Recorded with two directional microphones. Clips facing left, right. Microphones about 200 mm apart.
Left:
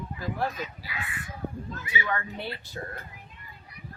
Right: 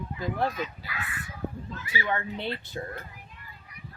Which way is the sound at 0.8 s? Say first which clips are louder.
Even; 20° left (ahead or behind).